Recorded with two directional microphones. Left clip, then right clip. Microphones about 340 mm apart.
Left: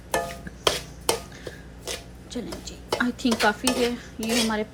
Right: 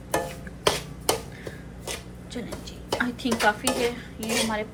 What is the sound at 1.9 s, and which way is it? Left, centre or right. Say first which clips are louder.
Dishes: left 1 dB; centre.